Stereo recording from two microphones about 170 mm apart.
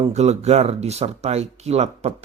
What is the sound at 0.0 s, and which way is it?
Speech, 40° right (ahead or behind).